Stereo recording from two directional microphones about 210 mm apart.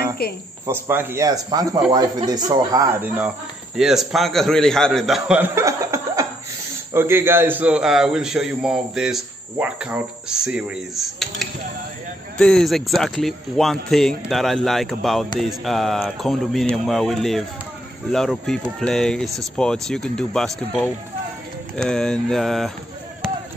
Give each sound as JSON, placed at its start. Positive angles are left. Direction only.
{"t": 0.2, "sound": "speech", "side_deg": 50}
{"t": 0.7, "sound": "speech", "side_deg": -10}